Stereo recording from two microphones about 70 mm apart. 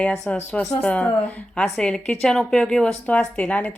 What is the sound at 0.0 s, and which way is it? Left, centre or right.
A woman's voice, centre.